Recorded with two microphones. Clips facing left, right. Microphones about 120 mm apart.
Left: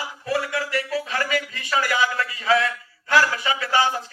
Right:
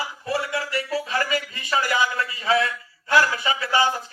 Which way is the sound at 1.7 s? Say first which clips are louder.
Even; 25° right (ahead or behind).